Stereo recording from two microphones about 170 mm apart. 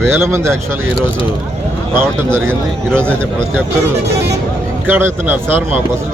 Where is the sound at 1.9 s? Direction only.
10° right (ahead or behind).